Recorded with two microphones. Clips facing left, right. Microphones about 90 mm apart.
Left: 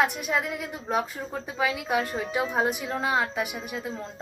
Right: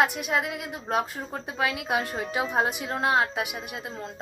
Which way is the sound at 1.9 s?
Centre (ahead or behind).